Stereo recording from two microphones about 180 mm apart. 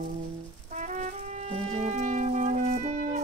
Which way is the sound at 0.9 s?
40° right (ahead or behind).